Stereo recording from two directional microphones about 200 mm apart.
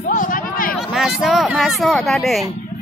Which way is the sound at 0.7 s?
Centre (ahead or behind).